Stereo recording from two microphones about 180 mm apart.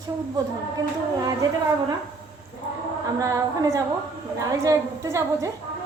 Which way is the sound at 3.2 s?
20° right (ahead or behind).